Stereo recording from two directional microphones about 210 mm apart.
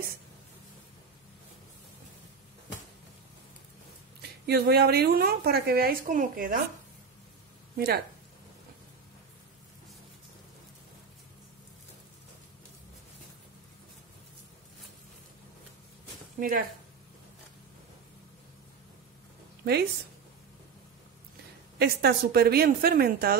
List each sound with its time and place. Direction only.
4.2 s speech: 50° right (ahead or behind)
7.7 s speech: 50° right (ahead or behind)
16.3 s speech: 40° right (ahead or behind)
21.7 s speech: 50° right (ahead or behind)